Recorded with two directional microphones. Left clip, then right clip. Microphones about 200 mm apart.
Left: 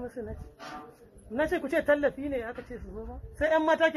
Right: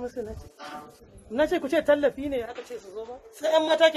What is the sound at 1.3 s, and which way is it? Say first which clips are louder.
A man's voice: right 4 dB; 15° left (ahead or behind).